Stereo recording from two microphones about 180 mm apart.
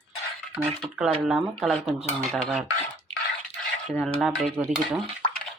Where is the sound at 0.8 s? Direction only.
5° right (ahead or behind).